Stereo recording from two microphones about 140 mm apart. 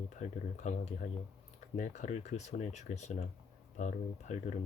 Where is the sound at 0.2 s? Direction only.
60° left (ahead or behind).